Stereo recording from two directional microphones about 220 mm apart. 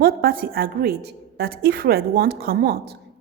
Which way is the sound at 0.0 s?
45° right (ahead or behind).